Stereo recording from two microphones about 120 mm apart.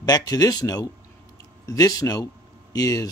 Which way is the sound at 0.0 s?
35° left (ahead or behind).